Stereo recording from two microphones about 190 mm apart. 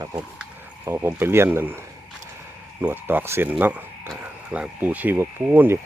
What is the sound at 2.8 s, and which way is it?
Speech, 10° right (ahead or behind).